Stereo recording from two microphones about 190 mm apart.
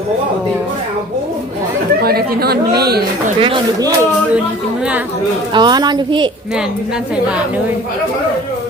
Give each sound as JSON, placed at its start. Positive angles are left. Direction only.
{"t": 2.0, "sound": "speech", "side_deg": -55}
{"t": 3.4, "sound": "a woman's voice", "side_deg": -25}
{"t": 5.5, "sound": "a woman's voice", "side_deg": -20}